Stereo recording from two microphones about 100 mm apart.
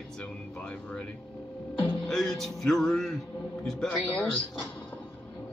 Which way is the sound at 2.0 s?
5° left (ahead or behind).